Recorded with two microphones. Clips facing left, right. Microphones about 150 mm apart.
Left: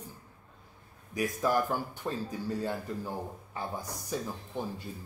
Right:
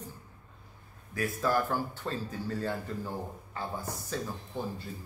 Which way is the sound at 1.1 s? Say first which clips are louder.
Left 1 dB; 15° left (ahead or behind).